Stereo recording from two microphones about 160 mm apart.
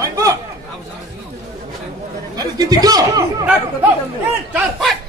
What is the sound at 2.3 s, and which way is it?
Speech, 25° right (ahead or behind).